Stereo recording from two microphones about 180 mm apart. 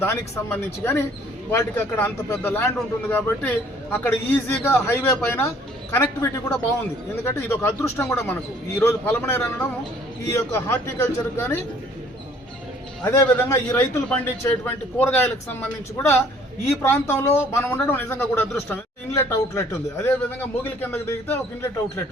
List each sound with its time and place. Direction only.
0.0 s speech: 10° left (ahead or behind)
13.0 s speech: 10° left (ahead or behind)
16.8 s speech: 15° left (ahead or behind)